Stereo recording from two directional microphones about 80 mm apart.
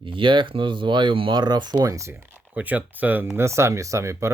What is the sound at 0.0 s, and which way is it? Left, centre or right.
Speech, right.